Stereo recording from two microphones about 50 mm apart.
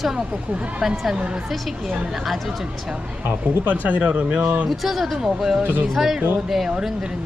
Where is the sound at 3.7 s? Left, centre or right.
Right.